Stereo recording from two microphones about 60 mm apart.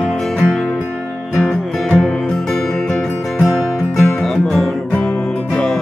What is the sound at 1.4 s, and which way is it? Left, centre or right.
Music, centre.